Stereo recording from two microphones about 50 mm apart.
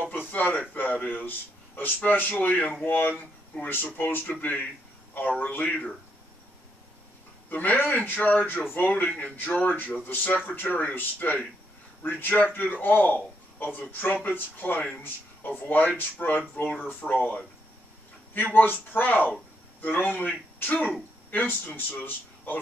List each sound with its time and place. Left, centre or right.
0.3 s a man's voice: left
7.4 s a man's voice: left